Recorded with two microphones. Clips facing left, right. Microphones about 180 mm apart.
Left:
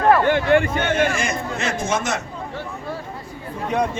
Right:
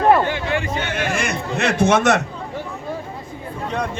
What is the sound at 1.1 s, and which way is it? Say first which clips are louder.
Speech: right 2 dB; 70° right (ahead or behind).